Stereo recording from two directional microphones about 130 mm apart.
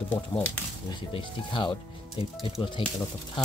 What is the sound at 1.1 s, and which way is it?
Speech, 40° left (ahead or behind).